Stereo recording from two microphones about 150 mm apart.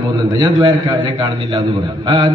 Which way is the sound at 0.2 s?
30° right (ahead or behind).